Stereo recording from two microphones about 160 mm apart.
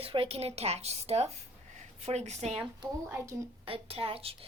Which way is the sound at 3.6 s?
35° right (ahead or behind).